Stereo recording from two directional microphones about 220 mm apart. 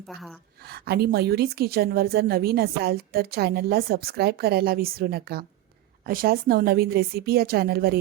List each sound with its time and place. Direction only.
0.1 s a woman's voice: centre (ahead or behind)
0.6 s a woman's voice: 45° right (ahead or behind)